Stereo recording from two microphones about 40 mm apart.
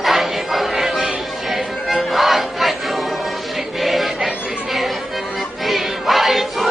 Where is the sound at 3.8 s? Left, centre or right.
Centre.